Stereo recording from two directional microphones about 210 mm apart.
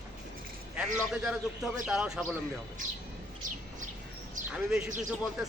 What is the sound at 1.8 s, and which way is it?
Speech, 5° right (ahead or behind).